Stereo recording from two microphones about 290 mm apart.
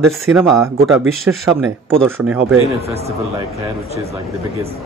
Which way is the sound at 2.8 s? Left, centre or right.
Right.